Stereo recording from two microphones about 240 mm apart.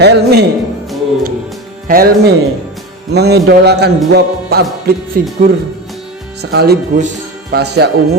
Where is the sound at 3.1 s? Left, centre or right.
Right.